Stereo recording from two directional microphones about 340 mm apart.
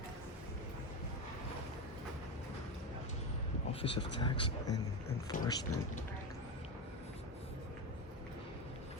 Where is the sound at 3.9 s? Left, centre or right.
Centre.